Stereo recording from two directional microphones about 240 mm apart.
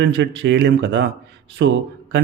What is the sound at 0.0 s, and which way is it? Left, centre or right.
Speech, right.